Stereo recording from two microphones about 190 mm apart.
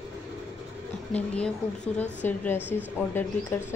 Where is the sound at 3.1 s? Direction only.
10° left (ahead or behind).